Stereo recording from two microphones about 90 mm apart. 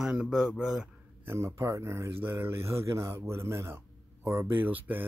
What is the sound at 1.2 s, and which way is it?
Speech, 30° right (ahead or behind).